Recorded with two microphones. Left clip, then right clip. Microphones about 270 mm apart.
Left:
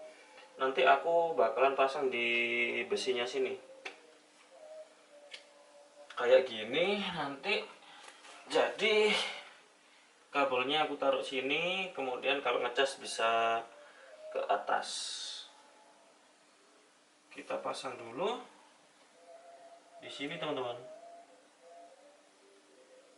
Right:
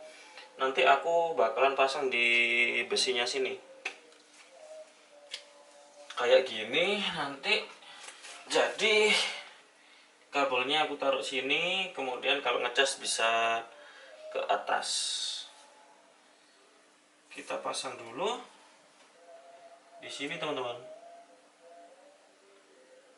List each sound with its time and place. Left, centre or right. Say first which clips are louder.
0.5 s speech: right 2 dB; centre
1.0 s speech: right 2 dB; left
1.4 s speech: right 2 dB; centre
6.1 s speech: right 2 dB; centre
17.3 s speech: right 2 dB; centre
20.0 s speech: right 3 dB; centre